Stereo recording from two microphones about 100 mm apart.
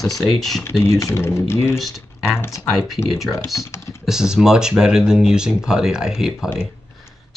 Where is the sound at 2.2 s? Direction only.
25° left (ahead or behind).